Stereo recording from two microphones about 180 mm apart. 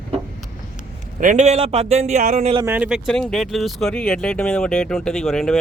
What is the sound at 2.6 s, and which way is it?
Speech, 10° right (ahead or behind).